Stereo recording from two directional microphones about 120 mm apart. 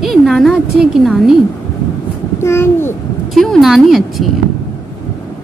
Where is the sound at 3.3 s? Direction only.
Centre (ahead or behind).